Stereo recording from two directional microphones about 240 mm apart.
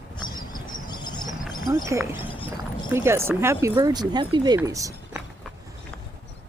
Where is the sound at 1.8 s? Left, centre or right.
Centre.